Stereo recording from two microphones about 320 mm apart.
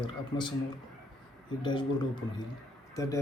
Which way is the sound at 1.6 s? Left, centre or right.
Centre.